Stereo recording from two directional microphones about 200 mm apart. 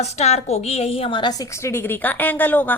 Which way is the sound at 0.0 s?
30° left (ahead or behind).